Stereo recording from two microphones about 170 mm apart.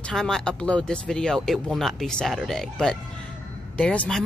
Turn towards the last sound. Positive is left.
turn(degrees=5)  # may be behind; listen again after turning